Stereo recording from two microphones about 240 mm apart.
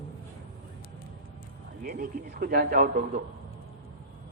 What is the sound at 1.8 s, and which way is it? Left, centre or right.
A man's voice, right.